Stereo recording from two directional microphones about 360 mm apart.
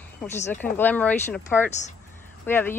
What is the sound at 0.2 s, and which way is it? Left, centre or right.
A woman's voice, centre.